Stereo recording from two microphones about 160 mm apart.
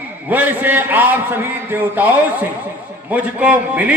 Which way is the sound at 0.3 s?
10° right (ahead or behind).